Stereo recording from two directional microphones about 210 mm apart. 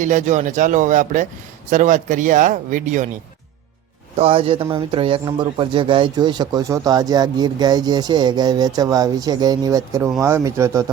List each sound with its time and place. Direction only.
0.0 s speech: 35° right (ahead or behind)
4.2 s speech: 25° right (ahead or behind)